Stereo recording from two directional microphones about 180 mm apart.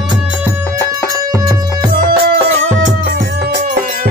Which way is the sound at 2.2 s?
80° right.